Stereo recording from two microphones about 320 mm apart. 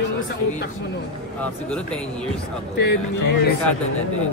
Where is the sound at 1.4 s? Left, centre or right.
Centre.